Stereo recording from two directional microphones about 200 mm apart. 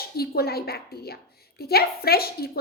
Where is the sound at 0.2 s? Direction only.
50° left (ahead or behind).